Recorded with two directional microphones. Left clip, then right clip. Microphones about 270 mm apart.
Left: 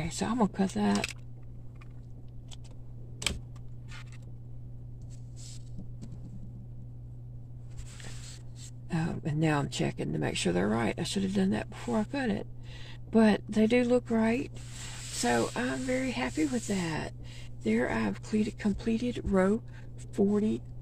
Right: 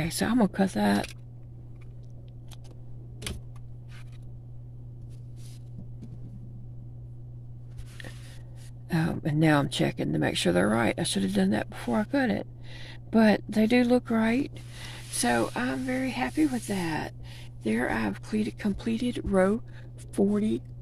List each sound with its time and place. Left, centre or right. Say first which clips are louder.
0.0 s speech: right 4 dB; right
8.8 s speech: right 5 dB; right
15.2 s speech: right 2 dB; centre
20.2 s speech: right 2 dB; right